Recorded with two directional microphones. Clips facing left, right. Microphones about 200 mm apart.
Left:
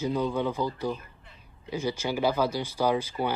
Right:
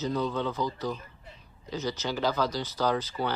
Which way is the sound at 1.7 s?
10° left (ahead or behind).